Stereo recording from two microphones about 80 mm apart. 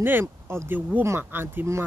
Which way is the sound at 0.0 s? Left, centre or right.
Right.